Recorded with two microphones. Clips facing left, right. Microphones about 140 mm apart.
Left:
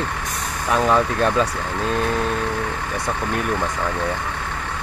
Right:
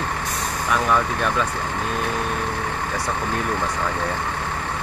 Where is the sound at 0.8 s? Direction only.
30° left (ahead or behind).